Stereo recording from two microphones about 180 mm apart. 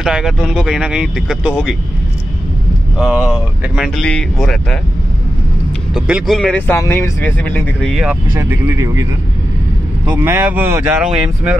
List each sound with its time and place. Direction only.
0.0 s speech: 5° right (ahead or behind)
3.0 s speech: 5° right (ahead or behind)
5.9 s speech: 5° right (ahead or behind)
6.8 s speech: 15° left (ahead or behind)
7.9 s speech: 5° right (ahead or behind)
8.4 s speech: 15° right (ahead or behind)
10.0 s speech: 10° right (ahead or behind)